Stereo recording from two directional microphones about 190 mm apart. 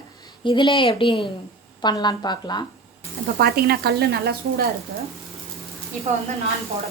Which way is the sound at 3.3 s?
55° right (ahead or behind).